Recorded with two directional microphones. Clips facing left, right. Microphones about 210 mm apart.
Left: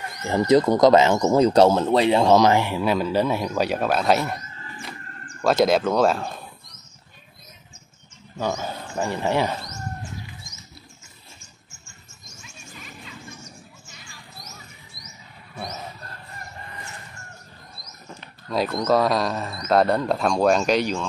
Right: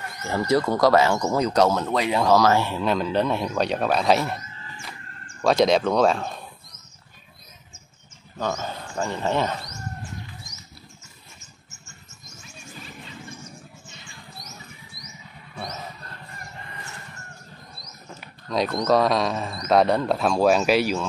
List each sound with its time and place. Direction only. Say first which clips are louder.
0.2 s speech: left 4 dB; 20° left (ahead or behind); by 4.4 s centre (ahead or behind)
5.4 s speech: even; 5° left (ahead or behind)
8.4 s speech: left 1 dB; 10° left (ahead or behind)
18.5 s speech: even; 5° left (ahead or behind)